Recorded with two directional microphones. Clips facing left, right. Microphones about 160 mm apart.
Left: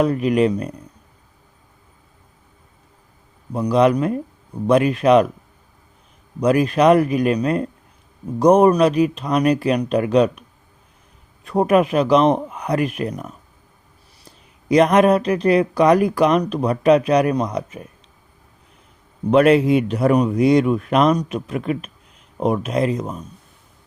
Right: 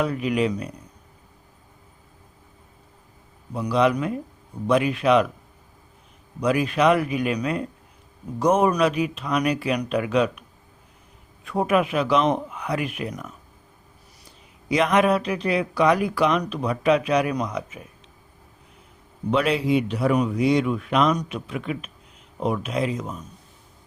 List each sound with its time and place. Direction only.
0.0 s a man's voice: 45° left (ahead or behind)
3.5 s a man's voice: 45° left (ahead or behind)
6.4 s a man's voice: 40° left (ahead or behind)
11.4 s speech: 40° left (ahead or behind)
14.7 s speech: 40° left (ahead or behind)
19.3 s a man's voice: 55° left (ahead or behind)